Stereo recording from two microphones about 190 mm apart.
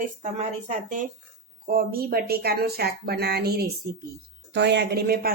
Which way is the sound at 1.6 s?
50° right (ahead or behind).